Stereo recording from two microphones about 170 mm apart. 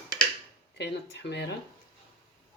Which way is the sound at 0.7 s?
90° left.